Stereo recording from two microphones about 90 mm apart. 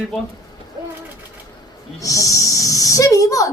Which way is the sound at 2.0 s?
40° left (ahead or behind).